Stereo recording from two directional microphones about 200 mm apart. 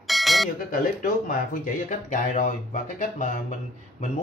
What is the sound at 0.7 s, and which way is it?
Speech, 45° left (ahead or behind).